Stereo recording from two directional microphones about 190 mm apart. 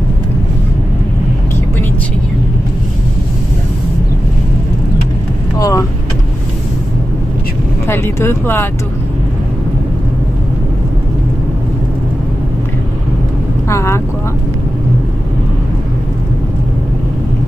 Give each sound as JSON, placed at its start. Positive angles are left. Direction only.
{"t": 5.6, "sound": "vehicle", "side_deg": 15}
{"t": 7.8, "sound": "speech", "side_deg": 15}
{"t": 13.7, "sound": "vehicle", "side_deg": 15}